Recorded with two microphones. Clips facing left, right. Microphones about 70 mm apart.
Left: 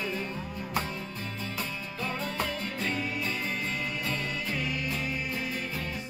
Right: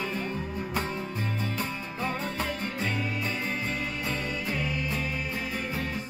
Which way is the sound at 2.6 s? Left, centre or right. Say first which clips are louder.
Right 1 dB; centre.